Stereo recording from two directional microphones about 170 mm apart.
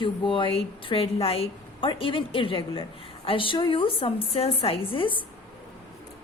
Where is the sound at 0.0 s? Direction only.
30° left (ahead or behind).